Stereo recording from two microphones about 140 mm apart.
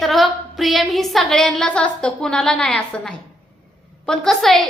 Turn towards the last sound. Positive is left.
turn(degrees=0)  # may be behind; listen again after turning